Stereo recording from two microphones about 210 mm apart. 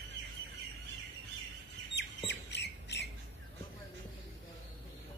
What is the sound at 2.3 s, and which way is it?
Squawk, 55° left (ahead or behind).